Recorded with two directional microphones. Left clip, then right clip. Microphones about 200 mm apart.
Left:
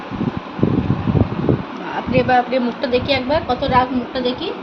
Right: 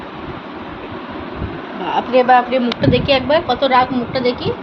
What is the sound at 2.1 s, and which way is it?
A woman's voice, 20° right (ahead or behind).